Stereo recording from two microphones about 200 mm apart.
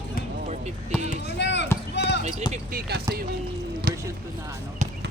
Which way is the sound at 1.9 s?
60° left (ahead or behind).